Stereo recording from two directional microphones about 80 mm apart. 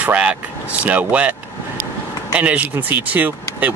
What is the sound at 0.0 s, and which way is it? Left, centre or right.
Speech, centre.